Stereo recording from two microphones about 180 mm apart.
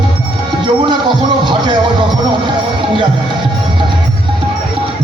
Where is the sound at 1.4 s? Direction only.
25° right (ahead or behind).